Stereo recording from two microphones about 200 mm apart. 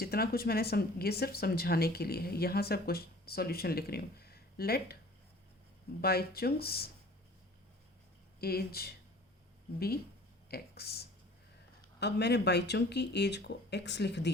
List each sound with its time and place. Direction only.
0.0 s speech: 50° left (ahead or behind)
6.0 s speech: 50° left (ahead or behind)
8.4 s speech: 50° left (ahead or behind)
10.5 s speech: 50° left (ahead or behind)